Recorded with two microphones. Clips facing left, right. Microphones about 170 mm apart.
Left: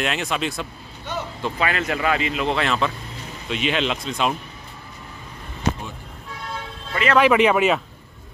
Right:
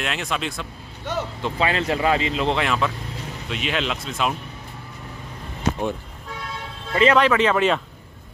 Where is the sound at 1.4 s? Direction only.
25° right (ahead or behind).